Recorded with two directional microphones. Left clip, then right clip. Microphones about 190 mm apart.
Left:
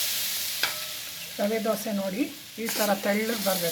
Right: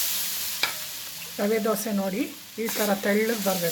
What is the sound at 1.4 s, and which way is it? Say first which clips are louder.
Frying: right 2 dB; 25° right (ahead or behind).